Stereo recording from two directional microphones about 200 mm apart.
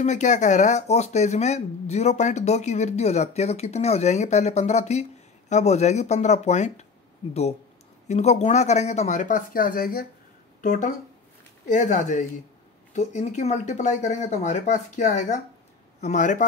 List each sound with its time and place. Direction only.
0.0 s speech: 35° left (ahead or behind)
8.1 s speech: 35° left (ahead or behind)